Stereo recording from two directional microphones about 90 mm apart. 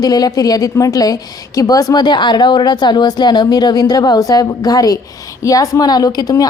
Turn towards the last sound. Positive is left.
turn(degrees=40)  # may be behind; listen again after turning